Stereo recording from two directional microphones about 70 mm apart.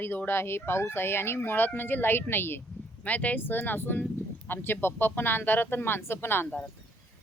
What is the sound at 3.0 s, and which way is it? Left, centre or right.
Speech, left.